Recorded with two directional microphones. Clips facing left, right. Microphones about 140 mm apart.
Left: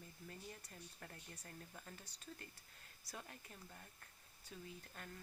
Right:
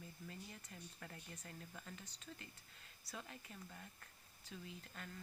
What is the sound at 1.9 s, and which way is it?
Speech, 45° left (ahead or behind).